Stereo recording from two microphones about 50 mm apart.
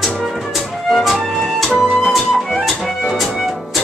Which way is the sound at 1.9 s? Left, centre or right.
Centre.